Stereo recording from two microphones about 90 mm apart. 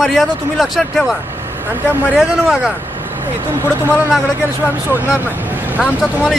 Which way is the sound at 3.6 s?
20° right (ahead or behind).